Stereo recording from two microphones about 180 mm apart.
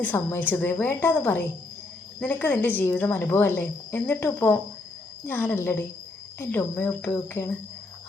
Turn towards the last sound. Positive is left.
turn(degrees=15)  # may be behind; listen again after turning